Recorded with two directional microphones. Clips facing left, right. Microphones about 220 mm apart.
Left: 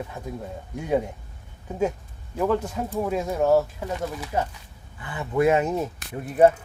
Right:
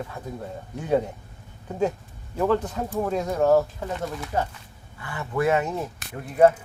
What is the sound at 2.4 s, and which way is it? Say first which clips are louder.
Speech: right 1 dB; 5° left (ahead or behind).